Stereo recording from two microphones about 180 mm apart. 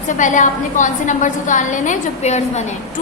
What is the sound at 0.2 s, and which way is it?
A woman's voice, 45° left (ahead or behind).